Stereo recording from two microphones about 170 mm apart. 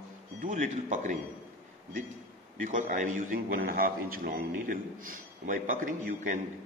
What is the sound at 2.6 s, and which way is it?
A man's voice, 50° right (ahead or behind).